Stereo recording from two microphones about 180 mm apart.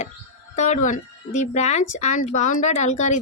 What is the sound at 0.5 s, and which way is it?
A woman's voice, 40° left (ahead or behind).